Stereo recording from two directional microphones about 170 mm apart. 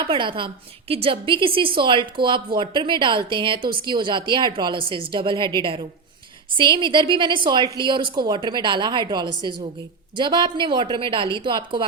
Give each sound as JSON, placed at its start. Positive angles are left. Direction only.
{"t": 0.0, "sound": "a woman's voice", "side_deg": -30}